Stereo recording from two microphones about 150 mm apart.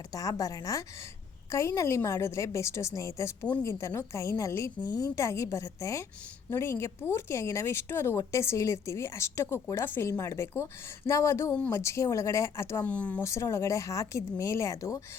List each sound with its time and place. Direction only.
0.1 s speech: 25° left (ahead or behind)